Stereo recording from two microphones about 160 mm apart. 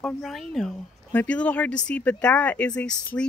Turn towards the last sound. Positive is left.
turn(degrees=5)  # may be behind; listen again after turning